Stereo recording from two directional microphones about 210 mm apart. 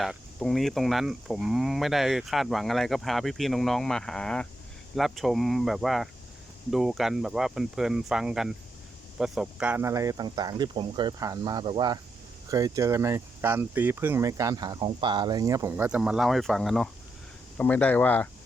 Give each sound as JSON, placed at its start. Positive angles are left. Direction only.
{"t": 0.0, "sound": "speech", "side_deg": 0}